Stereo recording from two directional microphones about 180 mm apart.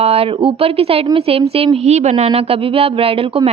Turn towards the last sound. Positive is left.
turn(degrees=-30)  # may be behind; listen again after turning